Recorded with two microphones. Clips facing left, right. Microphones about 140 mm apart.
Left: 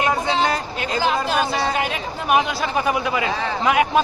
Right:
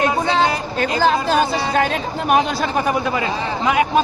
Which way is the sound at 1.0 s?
40° right (ahead or behind).